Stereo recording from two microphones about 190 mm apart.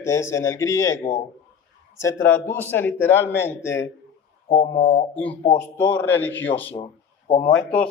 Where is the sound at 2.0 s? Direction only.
10° left (ahead or behind).